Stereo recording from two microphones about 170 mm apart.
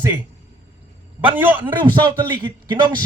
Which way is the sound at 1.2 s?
10° right (ahead or behind).